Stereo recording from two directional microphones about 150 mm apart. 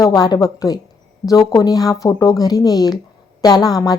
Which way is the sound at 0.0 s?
25° left (ahead or behind).